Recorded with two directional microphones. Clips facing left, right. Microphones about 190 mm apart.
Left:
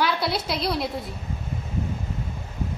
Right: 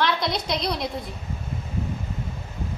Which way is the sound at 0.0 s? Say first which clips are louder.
Even; 5° left (ahead or behind).